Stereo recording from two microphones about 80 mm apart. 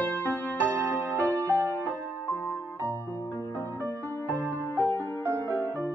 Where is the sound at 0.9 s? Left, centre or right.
Left.